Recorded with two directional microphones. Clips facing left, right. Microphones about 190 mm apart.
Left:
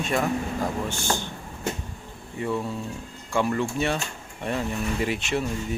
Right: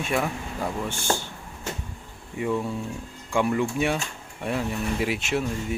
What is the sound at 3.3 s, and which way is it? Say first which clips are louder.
Speech: right 1 dB; 10° right (ahead or behind).